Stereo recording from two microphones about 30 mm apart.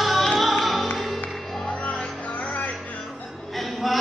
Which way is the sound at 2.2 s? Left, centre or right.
Left.